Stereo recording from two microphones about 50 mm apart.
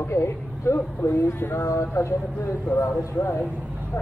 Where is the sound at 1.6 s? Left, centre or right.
Left.